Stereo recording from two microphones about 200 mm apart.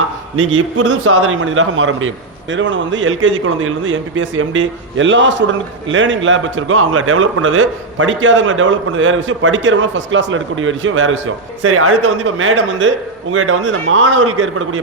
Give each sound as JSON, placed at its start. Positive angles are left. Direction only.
{"t": 1.0, "sound": "a man's voice", "side_deg": -90}
{"t": 11.6, "sound": "a man's voice", "side_deg": -90}